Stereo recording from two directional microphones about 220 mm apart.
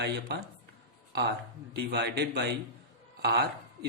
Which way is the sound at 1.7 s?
50° right (ahead or behind).